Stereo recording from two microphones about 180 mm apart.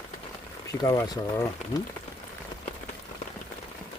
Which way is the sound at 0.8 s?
20° left (ahead or behind).